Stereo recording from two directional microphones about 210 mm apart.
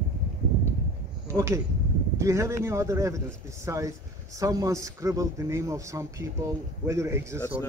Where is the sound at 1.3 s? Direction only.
15° right (ahead or behind).